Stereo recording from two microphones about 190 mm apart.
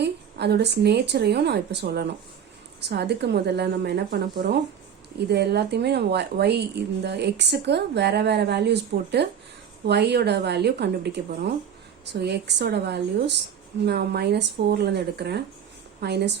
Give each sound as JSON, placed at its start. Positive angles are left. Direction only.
{"t": 0.0, "sound": "a woman's voice", "side_deg": -60}